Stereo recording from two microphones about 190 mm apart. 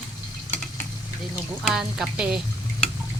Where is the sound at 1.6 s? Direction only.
Centre (ahead or behind).